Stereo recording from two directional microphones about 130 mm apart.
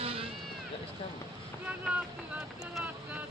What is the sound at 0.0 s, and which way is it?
Run, 45° right (ahead or behind).